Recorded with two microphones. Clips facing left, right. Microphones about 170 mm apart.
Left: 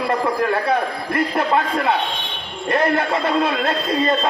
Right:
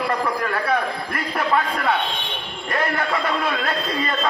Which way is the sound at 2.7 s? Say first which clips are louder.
Left 5 dB; 25° left (ahead or behind).